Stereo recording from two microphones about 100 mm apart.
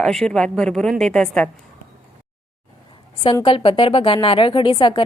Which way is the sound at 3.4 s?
60° left (ahead or behind).